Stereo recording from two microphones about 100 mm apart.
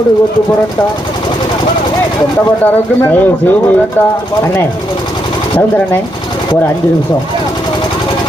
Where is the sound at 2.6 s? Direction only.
20° left (ahead or behind).